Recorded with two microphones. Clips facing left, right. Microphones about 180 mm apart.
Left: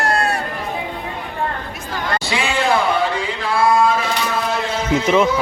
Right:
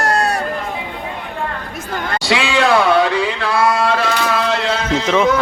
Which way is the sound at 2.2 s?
80° right.